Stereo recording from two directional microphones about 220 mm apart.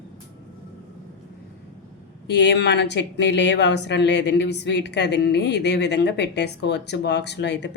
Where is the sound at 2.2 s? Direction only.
50° left (ahead or behind).